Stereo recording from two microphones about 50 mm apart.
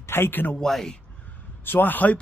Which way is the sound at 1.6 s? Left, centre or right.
Left.